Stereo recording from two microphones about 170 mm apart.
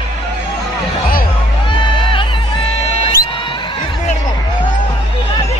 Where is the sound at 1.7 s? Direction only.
30° left (ahead or behind).